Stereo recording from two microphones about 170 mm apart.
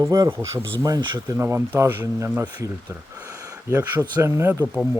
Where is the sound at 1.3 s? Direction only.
15° right (ahead or behind).